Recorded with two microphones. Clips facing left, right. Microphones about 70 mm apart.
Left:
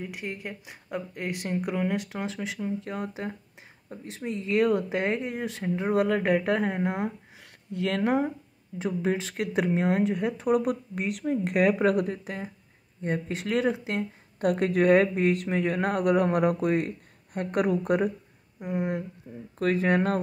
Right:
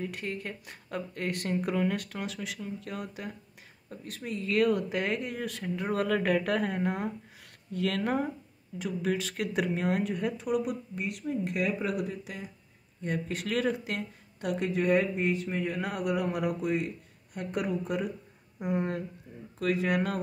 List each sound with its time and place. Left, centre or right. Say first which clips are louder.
0.0 s speech: even; centre
8.7 s speech: left 3 dB; left
10.3 s speech: left 5 dB; left
13.0 s speech: left 3 dB; left
14.4 s speech: left 6 dB; left
18.6 s speech: right 2 dB; centre
19.3 s speech: left 4 dB; left